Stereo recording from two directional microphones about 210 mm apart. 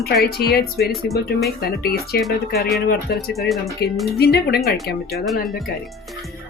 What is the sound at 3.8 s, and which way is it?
Speech, 50° left (ahead or behind).